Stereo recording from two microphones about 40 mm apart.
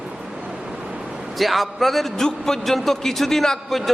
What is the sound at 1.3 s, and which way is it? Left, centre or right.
Speech, centre.